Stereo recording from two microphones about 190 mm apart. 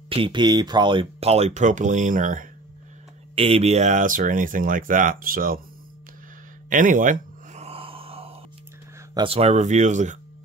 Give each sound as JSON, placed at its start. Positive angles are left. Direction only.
{"t": 0.1, "sound": "speech", "side_deg": -25}
{"t": 3.3, "sound": "speech", "side_deg": -30}
{"t": 6.7, "sound": "gasp", "side_deg": -45}
{"t": 9.1, "sound": "speech", "side_deg": -30}